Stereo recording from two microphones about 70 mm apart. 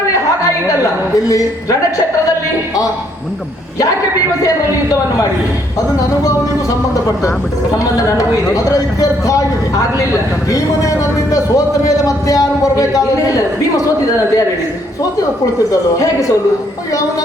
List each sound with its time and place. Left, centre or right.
6.0 s a man's voice: left
8.0 s a man's voice: left